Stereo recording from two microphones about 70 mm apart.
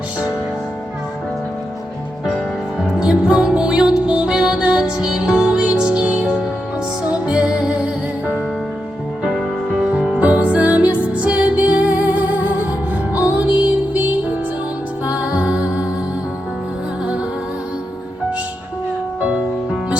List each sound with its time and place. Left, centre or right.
2.2 s music: centre
9.2 s music: centre